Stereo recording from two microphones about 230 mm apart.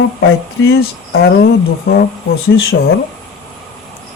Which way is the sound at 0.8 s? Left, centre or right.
Left.